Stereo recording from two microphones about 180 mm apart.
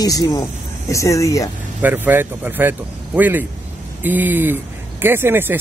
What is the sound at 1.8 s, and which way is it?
Speech, 10° right (ahead or behind).